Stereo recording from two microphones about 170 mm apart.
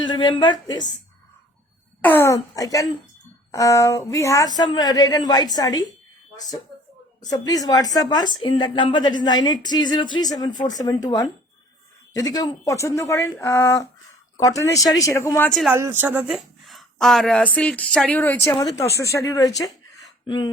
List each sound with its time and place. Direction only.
0.0 s a woman's voice: 25° left (ahead or behind)
2.0 s speech: 15° left (ahead or behind)
7.3 s speech: 20° left (ahead or behind)
15.7 s speech: 15° right (ahead or behind); by 19.5 s 20° left (ahead or behind)
20.0 s a sound: 25° left (ahead or behind)